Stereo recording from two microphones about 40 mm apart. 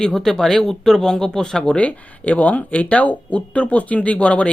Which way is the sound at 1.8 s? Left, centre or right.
Left.